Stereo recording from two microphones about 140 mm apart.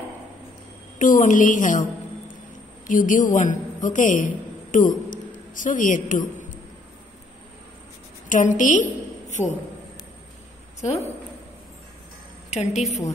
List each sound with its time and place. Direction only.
0.9 s a woman's voice: 70° left (ahead or behind)
2.9 s a man's voice: 70° left (ahead or behind)
5.1 s a sound: 70° left (ahead or behind)
8.3 s a woman's voice: 65° left (ahead or behind)
10.8 s a woman's voice: 50° left (ahead or behind)
12.4 s a woman's voice: 55° left (ahead or behind)